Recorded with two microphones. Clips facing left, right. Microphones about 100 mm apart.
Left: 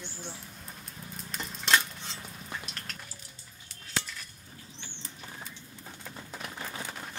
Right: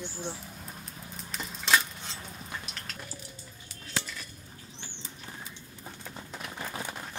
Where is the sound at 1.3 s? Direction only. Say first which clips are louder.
Even; centre (ahead or behind).